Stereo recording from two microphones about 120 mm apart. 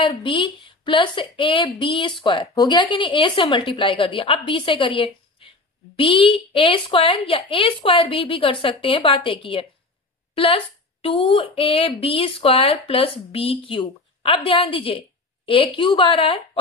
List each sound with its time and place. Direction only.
0.0 s speech: 45° left (ahead or behind)